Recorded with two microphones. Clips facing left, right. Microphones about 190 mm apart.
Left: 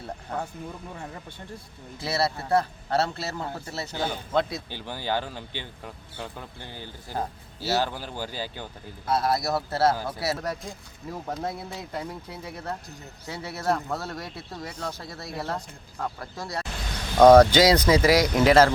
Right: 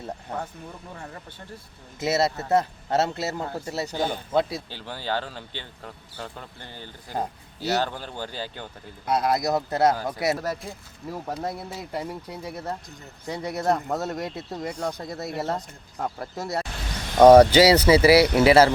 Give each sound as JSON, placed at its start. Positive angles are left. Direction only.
{"t": 2.0, "sound": "speech", "side_deg": -20}
{"t": 4.7, "sound": "speech", "side_deg": 15}
{"t": 7.1, "sound": "speech", "side_deg": -20}
{"t": 7.9, "sound": "speech", "side_deg": 10}
{"t": 9.0, "sound": "speech", "side_deg": -20}
{"t": 10.3, "sound": "speech", "side_deg": -5}
{"t": 13.2, "sound": "speech", "side_deg": 5}
{"t": 13.5, "sound": "speech", "side_deg": -15}
{"t": 17.2, "sound": "speech", "side_deg": -10}